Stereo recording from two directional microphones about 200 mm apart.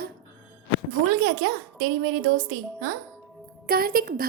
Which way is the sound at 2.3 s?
90° right.